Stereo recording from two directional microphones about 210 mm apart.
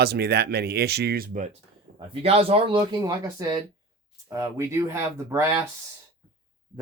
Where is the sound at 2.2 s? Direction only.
30° right (ahead or behind).